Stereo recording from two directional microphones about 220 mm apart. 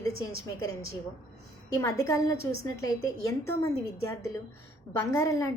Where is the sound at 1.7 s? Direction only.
15° left (ahead or behind).